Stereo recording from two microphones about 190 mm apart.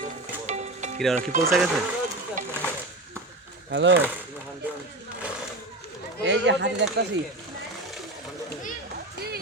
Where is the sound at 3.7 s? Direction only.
70° right (ahead or behind).